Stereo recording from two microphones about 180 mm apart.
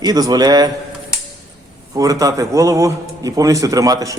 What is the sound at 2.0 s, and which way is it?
A man's voice, 20° right (ahead or behind).